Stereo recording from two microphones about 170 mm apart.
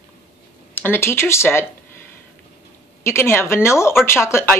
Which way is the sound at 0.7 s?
10° left (ahead or behind).